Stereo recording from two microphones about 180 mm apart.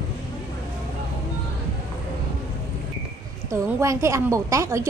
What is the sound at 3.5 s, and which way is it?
A woman's voice, 15° right (ahead or behind).